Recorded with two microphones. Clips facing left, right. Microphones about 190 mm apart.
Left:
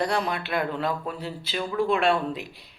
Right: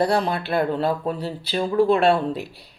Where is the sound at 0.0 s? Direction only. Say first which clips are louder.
Right 5 dB; 35° right (ahead or behind).